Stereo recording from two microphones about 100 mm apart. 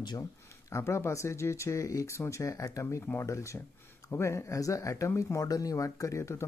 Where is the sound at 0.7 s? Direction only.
30° left (ahead or behind).